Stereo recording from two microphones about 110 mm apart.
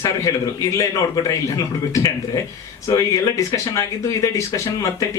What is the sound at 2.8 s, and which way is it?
Speech, 30° left (ahead or behind).